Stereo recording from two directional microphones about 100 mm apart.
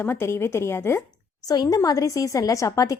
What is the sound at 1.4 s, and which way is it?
A woman's voice, 40° left (ahead or behind).